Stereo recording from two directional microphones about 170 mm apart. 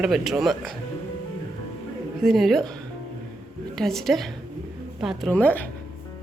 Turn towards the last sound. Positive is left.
turn(degrees=10)  # may be behind; listen again after turning